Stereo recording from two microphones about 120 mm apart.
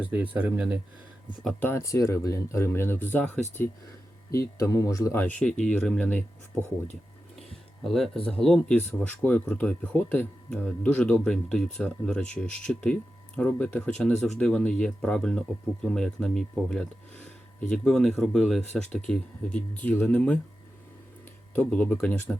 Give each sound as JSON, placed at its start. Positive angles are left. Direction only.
{"t": 0.0, "sound": "speech", "side_deg": -15}
{"t": 1.6, "sound": "speech", "side_deg": 25}
{"t": 4.3, "sound": "speech", "side_deg": 25}
{"t": 5.2, "sound": "speech", "side_deg": 10}
{"t": 7.9, "sound": "speech", "side_deg": 0}
{"t": 21.5, "sound": "speech", "side_deg": 15}